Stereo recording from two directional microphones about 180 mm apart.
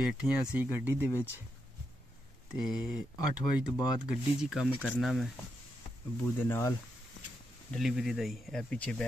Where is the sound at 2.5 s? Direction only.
Centre (ahead or behind).